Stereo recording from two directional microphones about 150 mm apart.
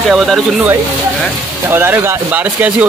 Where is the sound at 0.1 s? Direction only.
Centre (ahead or behind).